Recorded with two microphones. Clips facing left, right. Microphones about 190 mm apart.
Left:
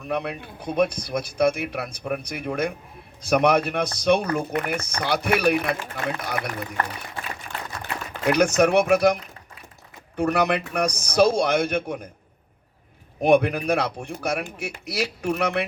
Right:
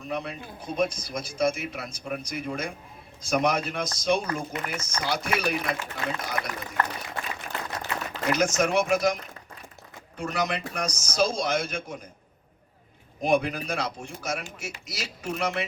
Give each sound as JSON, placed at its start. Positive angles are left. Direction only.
{"t": 0.0, "sound": "a man's voice", "side_deg": 60}
{"t": 7.8, "sound": "speech", "side_deg": 60}
{"t": 10.2, "sound": "a man's voice", "side_deg": 60}
{"t": 13.2, "sound": "a man's voice", "side_deg": 65}